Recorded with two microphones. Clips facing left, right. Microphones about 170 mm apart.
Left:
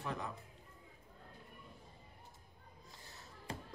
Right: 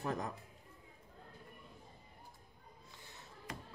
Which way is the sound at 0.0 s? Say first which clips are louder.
Right 3 dB; 40° right (ahead or behind).